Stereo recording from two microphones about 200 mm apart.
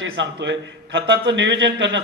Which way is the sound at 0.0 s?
65° right (ahead or behind).